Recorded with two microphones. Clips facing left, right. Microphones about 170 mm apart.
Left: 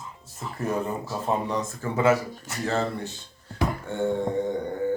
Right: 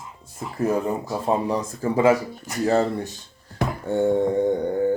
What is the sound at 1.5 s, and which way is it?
Mantra, 30° right (ahead or behind).